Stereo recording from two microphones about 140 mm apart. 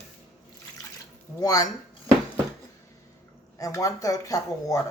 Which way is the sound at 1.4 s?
25° left (ahead or behind).